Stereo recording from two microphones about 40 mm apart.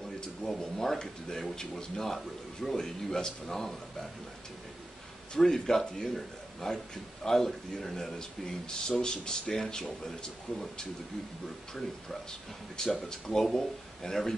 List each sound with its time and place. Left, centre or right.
0.4 s speech: centre
5.3 s speech: centre
10.5 s speech: left
11.7 s speech: centre